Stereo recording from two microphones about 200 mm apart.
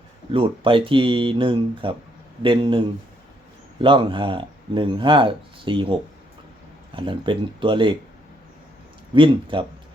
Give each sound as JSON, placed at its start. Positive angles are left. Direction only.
{"t": 0.3, "sound": "speech", "side_deg": -25}
{"t": 6.9, "sound": "speech", "side_deg": -25}
{"t": 9.1, "sound": "speech", "side_deg": -25}